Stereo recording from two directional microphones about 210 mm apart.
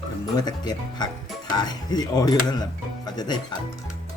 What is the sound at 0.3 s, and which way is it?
Speech, 20° left (ahead or behind).